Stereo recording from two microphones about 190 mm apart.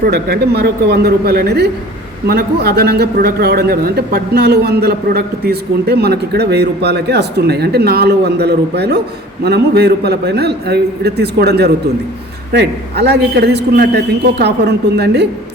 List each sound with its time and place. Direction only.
0.0 s a man's voice: 55° right (ahead or behind)